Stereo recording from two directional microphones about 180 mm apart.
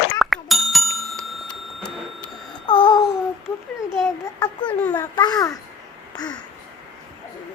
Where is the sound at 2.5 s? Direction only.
25° left (ahead or behind).